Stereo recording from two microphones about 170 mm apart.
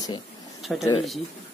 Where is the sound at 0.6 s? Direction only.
Centre (ahead or behind).